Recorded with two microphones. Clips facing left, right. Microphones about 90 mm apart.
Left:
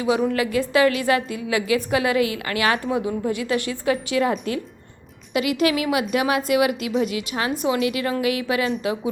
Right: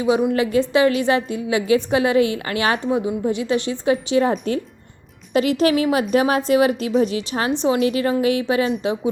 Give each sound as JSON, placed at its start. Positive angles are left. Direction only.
{"t": 0.3, "sound": "a woman's voice", "side_deg": -25}